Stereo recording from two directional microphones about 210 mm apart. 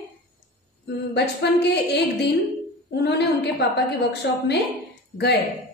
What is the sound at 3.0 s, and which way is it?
A woman's voice, 50° left (ahead or behind).